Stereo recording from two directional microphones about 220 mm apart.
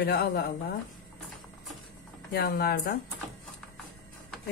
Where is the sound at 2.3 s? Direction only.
45° left (ahead or behind).